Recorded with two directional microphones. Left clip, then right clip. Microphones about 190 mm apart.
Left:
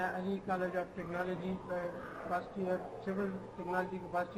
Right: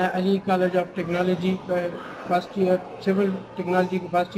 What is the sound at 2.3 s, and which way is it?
A man's voice, 30° right (ahead or behind).